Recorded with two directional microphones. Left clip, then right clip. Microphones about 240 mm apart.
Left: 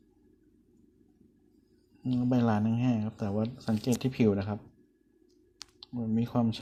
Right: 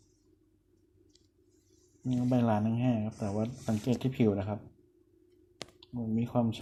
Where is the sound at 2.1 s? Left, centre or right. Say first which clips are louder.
Left 1 dB; left.